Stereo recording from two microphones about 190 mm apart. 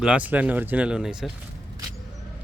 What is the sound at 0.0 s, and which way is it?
Speech, 5° right (ahead or behind).